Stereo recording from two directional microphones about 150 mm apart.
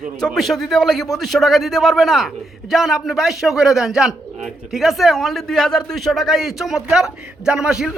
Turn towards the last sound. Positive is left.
turn(degrees=-5)  # may be behind; listen again after turning